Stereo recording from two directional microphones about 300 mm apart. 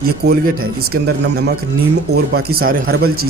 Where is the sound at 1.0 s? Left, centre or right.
Right.